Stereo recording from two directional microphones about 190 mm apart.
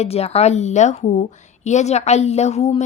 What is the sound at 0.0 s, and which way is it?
A woman's voice, 35° left (ahead or behind).